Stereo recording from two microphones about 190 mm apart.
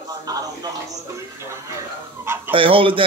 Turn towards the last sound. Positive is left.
turn(degrees=-30)  # may be behind; listen again after turning